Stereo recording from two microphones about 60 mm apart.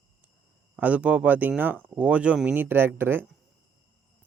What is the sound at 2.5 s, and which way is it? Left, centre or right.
Speech, right.